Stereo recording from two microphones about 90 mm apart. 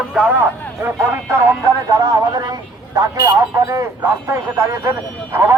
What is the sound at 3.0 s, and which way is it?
A man's voice, 35° right (ahead or behind).